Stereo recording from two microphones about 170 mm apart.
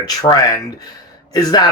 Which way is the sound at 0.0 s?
20° left (ahead or behind).